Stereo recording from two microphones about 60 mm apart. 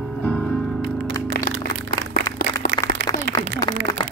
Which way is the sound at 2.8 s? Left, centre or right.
Left.